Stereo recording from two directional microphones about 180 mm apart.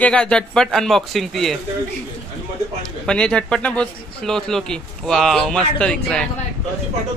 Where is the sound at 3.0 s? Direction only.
5° left (ahead or behind).